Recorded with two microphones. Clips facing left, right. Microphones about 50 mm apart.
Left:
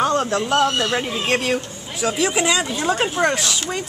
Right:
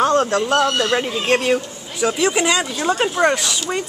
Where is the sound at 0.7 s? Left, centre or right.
Right.